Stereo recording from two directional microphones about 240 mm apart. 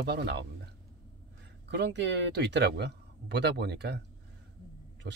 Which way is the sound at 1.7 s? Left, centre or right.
Right.